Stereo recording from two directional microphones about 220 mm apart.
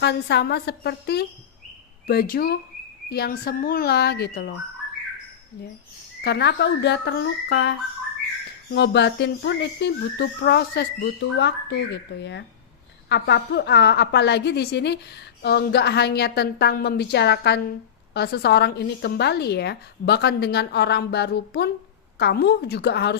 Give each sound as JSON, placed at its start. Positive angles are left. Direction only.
{"t": 0.0, "sound": "speech", "side_deg": 50}
{"t": 6.2, "sound": "speech", "side_deg": 50}